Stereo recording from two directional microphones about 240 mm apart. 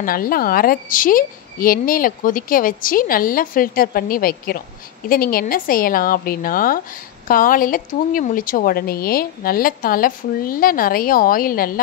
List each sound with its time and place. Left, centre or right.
0.0 s a woman's voice: left